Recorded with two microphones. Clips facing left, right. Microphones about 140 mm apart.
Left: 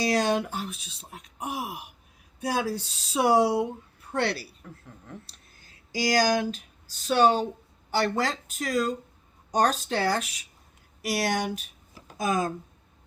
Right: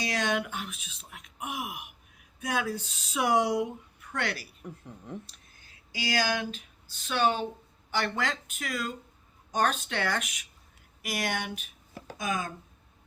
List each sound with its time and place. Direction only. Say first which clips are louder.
0.0 s speech: left 5 dB; 35° left (ahead or behind)
4.6 s a woman's voice: right 3 dB; 20° right (ahead or behind)
5.2 s speech: left 1 dB; 35° left (ahead or behind)